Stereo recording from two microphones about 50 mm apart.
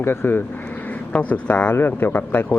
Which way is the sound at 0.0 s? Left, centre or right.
Left.